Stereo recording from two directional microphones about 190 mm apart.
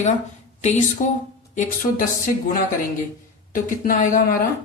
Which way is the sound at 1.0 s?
40° left (ahead or behind).